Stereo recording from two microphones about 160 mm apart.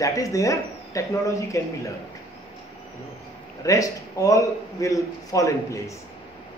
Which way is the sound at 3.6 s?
20° left (ahead or behind).